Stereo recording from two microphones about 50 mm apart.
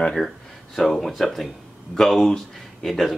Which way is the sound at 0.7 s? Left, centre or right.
Centre.